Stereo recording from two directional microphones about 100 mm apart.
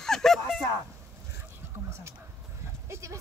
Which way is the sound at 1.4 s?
25° right (ahead or behind).